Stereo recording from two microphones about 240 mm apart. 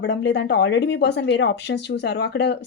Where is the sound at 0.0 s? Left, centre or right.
Left.